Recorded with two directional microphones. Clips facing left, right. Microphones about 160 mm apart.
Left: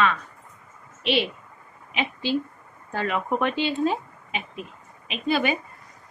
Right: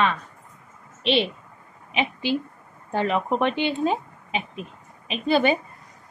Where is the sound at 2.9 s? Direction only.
25° right (ahead or behind).